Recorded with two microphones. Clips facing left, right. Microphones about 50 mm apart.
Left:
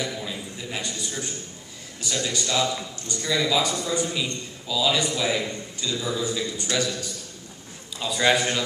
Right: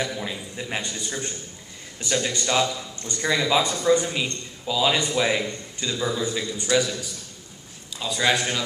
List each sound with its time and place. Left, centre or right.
0.0 s a sound: right
0.7 s a man's voice: right
8.0 s a man's voice: centre